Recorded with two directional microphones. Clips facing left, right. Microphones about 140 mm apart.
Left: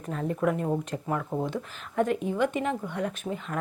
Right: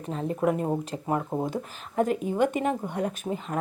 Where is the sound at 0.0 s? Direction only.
30° right (ahead or behind).